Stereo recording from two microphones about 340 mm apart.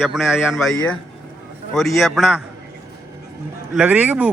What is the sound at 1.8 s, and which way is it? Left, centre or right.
Speech, centre.